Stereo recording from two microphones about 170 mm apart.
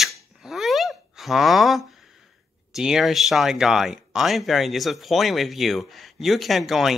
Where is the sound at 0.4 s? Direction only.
Centre (ahead or behind).